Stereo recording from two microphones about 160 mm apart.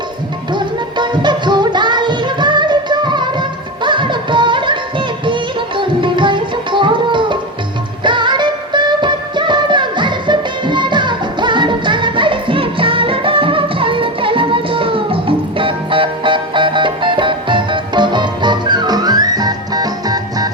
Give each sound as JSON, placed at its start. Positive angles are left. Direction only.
{"t": 0.5, "sound": "music", "side_deg": -30}